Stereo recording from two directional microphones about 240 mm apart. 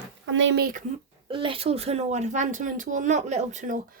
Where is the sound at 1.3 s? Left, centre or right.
Right.